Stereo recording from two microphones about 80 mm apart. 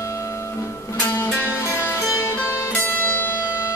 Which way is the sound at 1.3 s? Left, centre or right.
Left.